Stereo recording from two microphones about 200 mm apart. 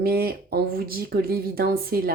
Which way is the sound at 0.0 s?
50° right (ahead or behind).